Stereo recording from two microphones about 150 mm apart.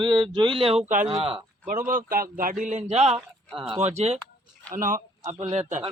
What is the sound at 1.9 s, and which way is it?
Speech, 65° right (ahead or behind).